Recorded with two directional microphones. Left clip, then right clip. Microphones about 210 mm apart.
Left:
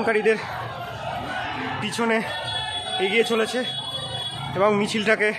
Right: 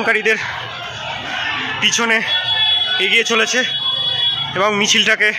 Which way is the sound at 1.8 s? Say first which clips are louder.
Right 9 dB; centre (ahead or behind).